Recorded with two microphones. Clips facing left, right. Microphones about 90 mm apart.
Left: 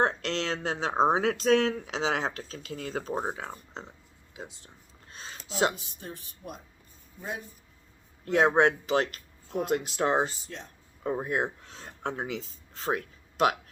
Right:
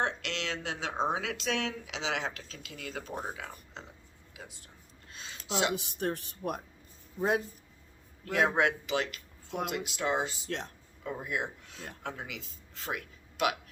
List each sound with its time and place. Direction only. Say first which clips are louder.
0.0 s speech: left 6 dB; 40° left (ahead or behind)
5.1 s a sound: left 3 dB; 40° left (ahead or behind)
5.7 s speech: right 10 dB; 75° right (ahead or behind)
8.2 s speech: left 5 dB; 25° left (ahead or behind)